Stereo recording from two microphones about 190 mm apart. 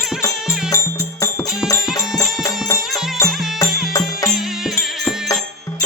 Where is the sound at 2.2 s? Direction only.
15° left (ahead or behind).